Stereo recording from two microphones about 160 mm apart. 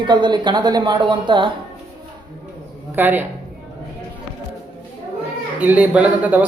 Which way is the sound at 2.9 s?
10° right (ahead or behind).